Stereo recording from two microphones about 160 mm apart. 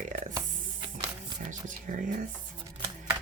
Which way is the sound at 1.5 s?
50° right (ahead or behind).